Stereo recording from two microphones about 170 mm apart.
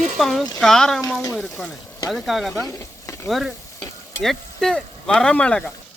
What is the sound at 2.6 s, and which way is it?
Speech, 20° left (ahead or behind).